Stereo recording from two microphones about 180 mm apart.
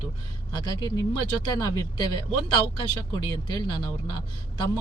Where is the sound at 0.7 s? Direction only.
20° left (ahead or behind).